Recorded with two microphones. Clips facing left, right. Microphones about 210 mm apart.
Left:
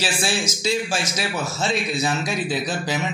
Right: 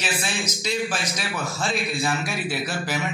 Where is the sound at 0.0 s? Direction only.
30° left (ahead or behind).